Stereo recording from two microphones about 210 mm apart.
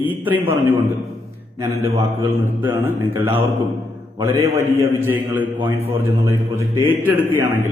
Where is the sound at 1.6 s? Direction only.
30° right (ahead or behind).